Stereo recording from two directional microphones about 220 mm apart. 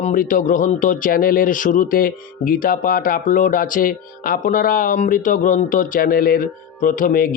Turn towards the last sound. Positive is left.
turn(degrees=40)  # may be behind; listen again after turning